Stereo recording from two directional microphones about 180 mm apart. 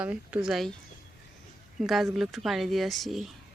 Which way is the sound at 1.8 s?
Centre (ahead or behind).